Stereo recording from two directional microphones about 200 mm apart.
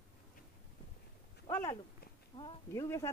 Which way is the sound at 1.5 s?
15° left (ahead or behind).